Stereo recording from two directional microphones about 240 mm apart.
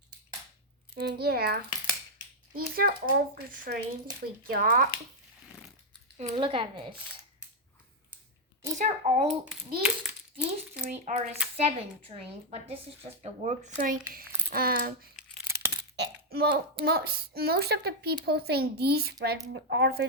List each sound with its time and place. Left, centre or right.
0.9 s speech: right
6.1 s speech: right
8.8 s speech: right
9.8 s a child's voice: centre
11.0 s speech: right